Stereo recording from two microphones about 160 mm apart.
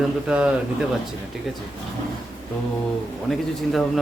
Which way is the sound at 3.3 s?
Centre (ahead or behind).